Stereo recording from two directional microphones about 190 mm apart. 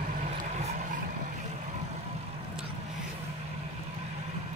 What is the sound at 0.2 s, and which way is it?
Vehicle, 35° right (ahead or behind).